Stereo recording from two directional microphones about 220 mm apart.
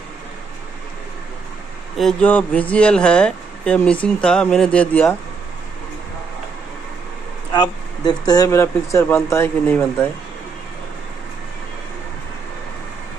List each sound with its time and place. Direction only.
2.0 s speech: 5° left (ahead or behind)
7.5 s speech: 20° left (ahead or behind)